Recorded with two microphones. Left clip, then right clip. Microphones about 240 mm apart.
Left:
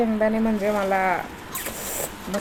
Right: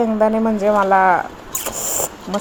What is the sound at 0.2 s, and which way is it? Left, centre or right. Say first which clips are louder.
Speech: right 6 dB; centre.